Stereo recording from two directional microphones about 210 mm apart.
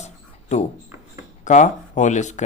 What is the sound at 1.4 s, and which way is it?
Speech, 35° left (ahead or behind).